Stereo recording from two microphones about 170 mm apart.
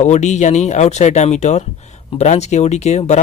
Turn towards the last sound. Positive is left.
turn(degrees=40)  # may be behind; listen again after turning